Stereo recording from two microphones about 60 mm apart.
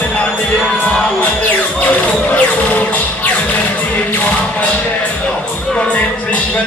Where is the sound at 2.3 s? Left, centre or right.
Left.